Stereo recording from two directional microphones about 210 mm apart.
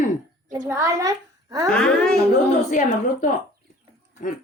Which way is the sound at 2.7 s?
35° left (ahead or behind).